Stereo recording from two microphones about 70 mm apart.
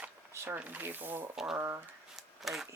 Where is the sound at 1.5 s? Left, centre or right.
Right.